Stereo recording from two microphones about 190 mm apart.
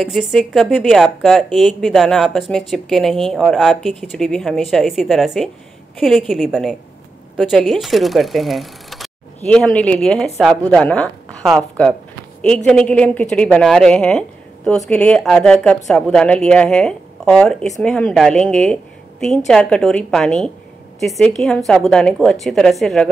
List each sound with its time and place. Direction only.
0.0 s a woman's voice: centre (ahead or behind)